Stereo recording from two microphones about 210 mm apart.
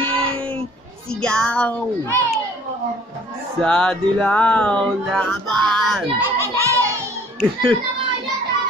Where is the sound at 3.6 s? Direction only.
5° left (ahead or behind).